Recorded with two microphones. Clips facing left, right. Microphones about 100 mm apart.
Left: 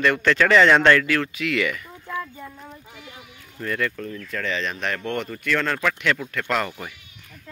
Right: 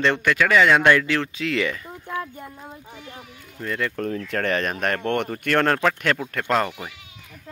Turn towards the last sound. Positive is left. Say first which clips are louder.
# right 3 dB
turn(degrees=-30)  # may be behind; listen again after turning